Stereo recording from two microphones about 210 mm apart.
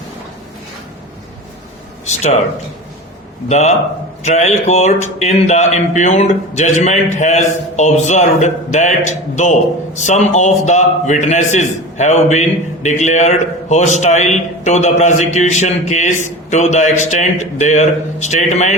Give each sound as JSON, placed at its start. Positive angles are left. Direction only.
{"t": 2.0, "sound": "a man's voice", "side_deg": 30}
{"t": 3.5, "sound": "a man's voice", "side_deg": 30}